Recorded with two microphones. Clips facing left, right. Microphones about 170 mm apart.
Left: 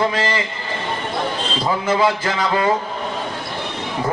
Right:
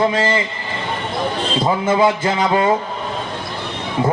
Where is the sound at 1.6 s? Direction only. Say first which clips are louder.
Right 3 dB; 25° right (ahead or behind).